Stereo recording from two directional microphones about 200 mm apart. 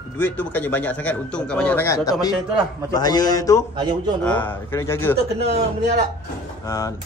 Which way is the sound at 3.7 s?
20° right (ahead or behind).